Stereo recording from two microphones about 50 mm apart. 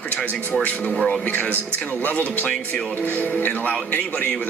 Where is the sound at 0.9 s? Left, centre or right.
Centre.